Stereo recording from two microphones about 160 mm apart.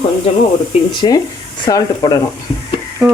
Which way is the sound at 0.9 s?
25° left (ahead or behind).